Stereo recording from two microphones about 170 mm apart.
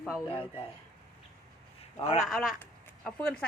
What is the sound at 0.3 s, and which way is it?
Speech, 30° left (ahead or behind).